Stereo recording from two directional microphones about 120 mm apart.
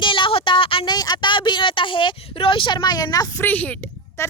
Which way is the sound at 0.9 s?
35° left (ahead or behind).